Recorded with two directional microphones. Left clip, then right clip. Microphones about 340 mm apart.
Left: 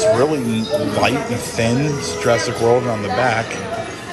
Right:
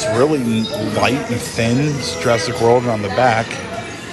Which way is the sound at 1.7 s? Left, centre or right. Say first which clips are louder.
Right 1 dB; left.